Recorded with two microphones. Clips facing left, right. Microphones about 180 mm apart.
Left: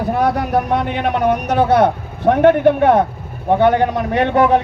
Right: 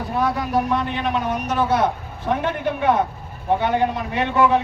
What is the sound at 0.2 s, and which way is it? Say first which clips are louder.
Speech: left 2 dB; 60° left (ahead or behind).